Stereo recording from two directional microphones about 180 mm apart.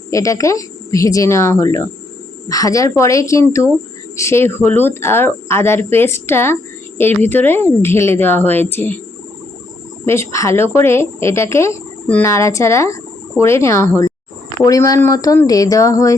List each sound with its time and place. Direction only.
0.1 s speech: 20° left (ahead or behind)
10.1 s speech: 15° left (ahead or behind)